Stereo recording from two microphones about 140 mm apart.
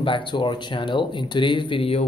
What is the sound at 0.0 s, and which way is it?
Speech, 35° left (ahead or behind).